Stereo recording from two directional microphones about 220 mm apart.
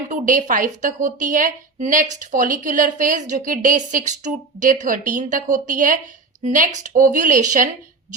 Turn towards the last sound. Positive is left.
turn(degrees=-35)  # may be behind; listen again after turning